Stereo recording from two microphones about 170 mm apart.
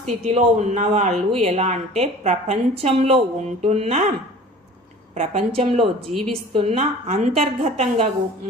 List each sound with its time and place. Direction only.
0.3 s a woman's voice: 40° right (ahead or behind)
5.1 s a woman's voice: 40° right (ahead or behind)